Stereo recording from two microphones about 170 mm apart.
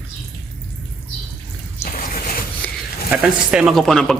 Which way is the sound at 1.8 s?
60° left (ahead or behind).